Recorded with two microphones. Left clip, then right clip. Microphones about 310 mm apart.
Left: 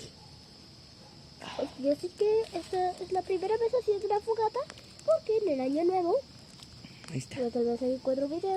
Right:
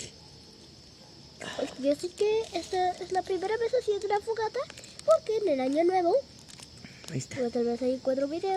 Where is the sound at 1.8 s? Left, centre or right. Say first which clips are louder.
Right 1 dB; centre.